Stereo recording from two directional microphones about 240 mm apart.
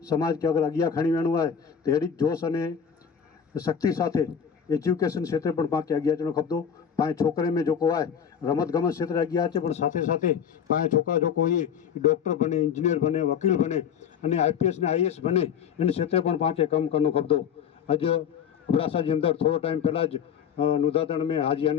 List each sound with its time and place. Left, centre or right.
0.1 s a man's voice: centre